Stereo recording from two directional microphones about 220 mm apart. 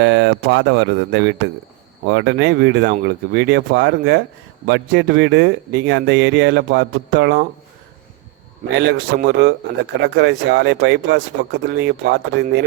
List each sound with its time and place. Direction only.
0.0 s speech: 55° right (ahead or behind)
8.8 s speech: 50° right (ahead or behind)